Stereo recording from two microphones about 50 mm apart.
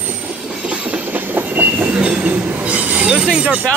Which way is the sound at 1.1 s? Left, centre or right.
Right.